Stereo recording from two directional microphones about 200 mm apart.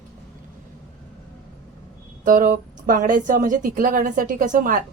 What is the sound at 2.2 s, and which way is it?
A woman's voice, 40° right (ahead or behind).